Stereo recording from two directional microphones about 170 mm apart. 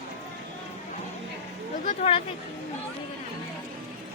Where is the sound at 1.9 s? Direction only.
35° left (ahead or behind).